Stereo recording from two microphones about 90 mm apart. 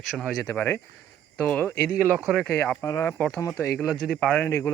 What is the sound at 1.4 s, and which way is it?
Speech, 15° left (ahead or behind).